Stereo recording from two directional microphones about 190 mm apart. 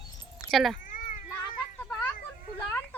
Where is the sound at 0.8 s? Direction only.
45° left (ahead or behind).